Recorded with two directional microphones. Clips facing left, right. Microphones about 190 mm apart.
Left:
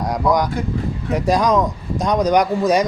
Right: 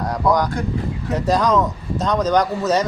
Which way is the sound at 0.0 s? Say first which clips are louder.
Left 1 dB; 15° left (ahead or behind).